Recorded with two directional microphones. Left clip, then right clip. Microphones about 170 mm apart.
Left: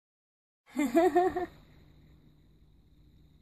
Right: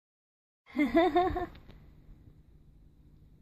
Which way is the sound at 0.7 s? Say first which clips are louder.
Even; 35° right (ahead or behind).